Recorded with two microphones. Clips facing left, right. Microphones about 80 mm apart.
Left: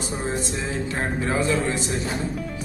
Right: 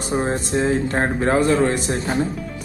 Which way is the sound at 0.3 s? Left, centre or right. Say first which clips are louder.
Right 7 dB; right.